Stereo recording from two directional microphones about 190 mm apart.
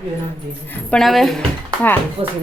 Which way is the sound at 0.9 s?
Centre (ahead or behind).